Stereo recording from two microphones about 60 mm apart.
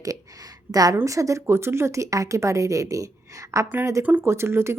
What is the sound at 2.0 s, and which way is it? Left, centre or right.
A woman's voice, right.